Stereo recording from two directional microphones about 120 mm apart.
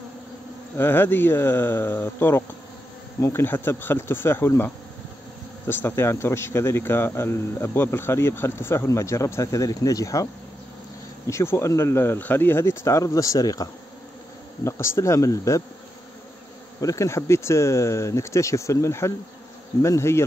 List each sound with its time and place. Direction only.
0.7 s a man's voice: 20° left (ahead or behind)
11.2 s a man's voice: 20° left (ahead or behind)
16.8 s a man's voice: 25° left (ahead or behind)